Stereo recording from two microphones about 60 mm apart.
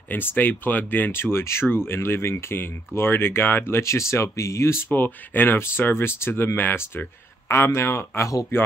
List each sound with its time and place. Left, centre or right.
0.1 s speech: left
3.8 s speech: left
4.9 s speech: left
7.4 s speech: left